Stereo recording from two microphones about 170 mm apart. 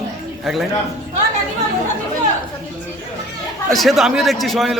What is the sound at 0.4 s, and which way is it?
Speech, centre (ahead or behind).